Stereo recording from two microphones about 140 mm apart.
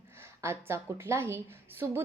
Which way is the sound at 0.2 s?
20° right (ahead or behind).